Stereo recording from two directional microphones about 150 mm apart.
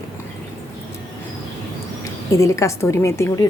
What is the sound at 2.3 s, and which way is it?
A woman's voice, 20° left (ahead or behind).